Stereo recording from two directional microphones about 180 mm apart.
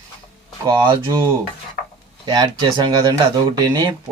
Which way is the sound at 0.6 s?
25° right (ahead or behind).